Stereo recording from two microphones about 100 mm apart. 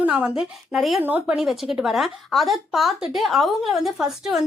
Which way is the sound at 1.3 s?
5° right (ahead or behind).